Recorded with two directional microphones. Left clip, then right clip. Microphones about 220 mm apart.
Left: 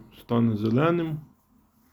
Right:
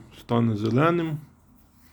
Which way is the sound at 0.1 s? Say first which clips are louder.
Right 1 dB; 15° right (ahead or behind).